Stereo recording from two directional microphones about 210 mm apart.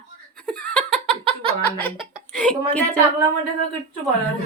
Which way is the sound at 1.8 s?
5° left (ahead or behind).